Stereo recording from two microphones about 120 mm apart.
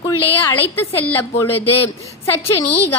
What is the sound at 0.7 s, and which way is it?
A woman's voice, 20° left (ahead or behind).